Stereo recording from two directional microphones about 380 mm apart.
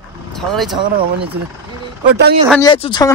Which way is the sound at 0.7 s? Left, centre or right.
Centre.